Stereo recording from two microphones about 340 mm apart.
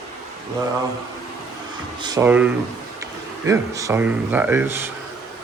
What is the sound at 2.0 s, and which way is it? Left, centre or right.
Speech, centre.